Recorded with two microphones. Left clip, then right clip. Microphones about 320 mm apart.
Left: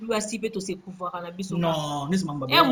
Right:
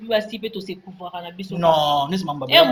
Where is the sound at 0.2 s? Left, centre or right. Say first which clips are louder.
Right 2 dB; centre.